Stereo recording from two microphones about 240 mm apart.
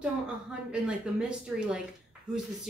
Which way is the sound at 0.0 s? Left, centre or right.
Centre.